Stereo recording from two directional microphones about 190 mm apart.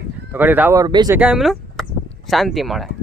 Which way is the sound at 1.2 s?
5° right (ahead or behind).